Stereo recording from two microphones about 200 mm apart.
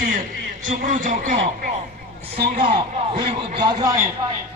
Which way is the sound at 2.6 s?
25° right (ahead or behind).